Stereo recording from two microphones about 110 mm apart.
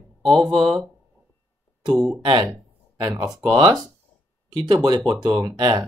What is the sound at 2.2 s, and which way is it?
Speech, 45° right (ahead or behind).